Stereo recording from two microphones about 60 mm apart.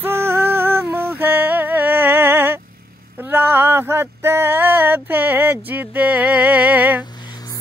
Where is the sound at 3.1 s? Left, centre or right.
Right.